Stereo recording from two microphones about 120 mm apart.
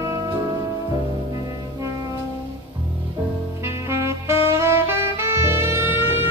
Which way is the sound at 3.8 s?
25° right (ahead or behind).